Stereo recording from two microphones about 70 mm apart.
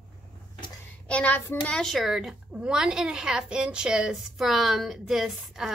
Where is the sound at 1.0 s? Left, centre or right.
Centre.